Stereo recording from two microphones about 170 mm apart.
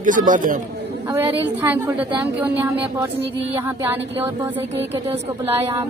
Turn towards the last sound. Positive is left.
turn(degrees=-15)  # may be behind; listen again after turning